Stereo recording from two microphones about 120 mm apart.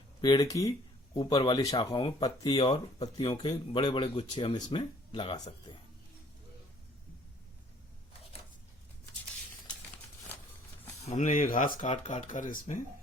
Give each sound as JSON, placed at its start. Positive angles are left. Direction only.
{"t": 0.2, "sound": "speech", "side_deg": 40}
{"t": 11.0, "sound": "speech", "side_deg": 80}